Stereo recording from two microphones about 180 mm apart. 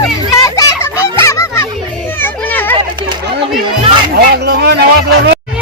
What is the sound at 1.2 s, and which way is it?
Honk, 15° left (ahead or behind).